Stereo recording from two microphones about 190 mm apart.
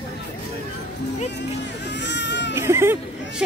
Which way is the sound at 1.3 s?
65° left (ahead or behind).